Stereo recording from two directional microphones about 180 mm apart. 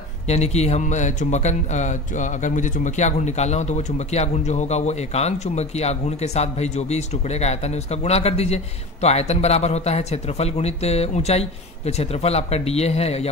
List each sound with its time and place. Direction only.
0.3 s speech: 35° left (ahead or behind)